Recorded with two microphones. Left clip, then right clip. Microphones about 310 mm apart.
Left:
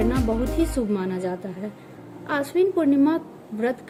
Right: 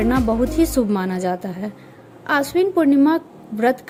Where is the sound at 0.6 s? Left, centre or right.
Right.